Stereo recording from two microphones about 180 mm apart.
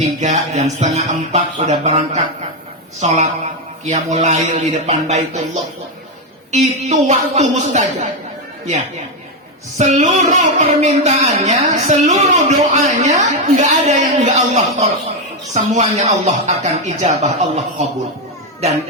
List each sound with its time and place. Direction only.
0.0 s speech: 40° right (ahead or behind)
6.5 s speech: 40° right (ahead or behind)
9.7 s speech: 40° right (ahead or behind)